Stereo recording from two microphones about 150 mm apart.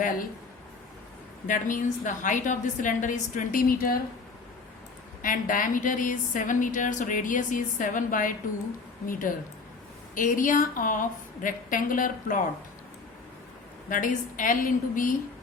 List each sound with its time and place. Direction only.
1.5 s a woman's voice: 60° left (ahead or behind)
5.2 s a woman's voice: 65° left (ahead or behind)
13.9 s a woman's voice: 60° left (ahead or behind)